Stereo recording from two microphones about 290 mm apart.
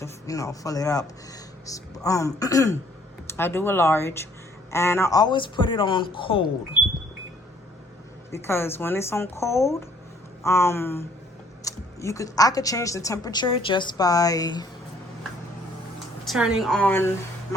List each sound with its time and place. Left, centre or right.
0.0 s a woman's voice: centre
8.3 s a woman's voice: centre
16.2 s a woman's voice: centre